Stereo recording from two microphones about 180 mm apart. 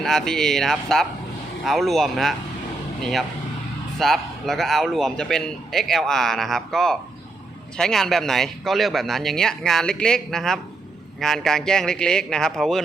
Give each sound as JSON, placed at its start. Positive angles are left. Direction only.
{"t": 0.0, "sound": "speech", "side_deg": 0}